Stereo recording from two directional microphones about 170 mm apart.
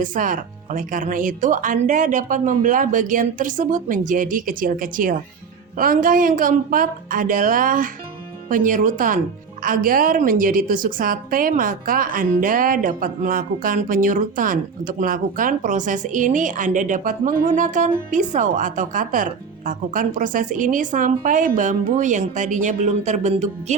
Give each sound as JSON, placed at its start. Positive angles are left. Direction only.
{"t": 0.0, "sound": "a woman's voice", "side_deg": -50}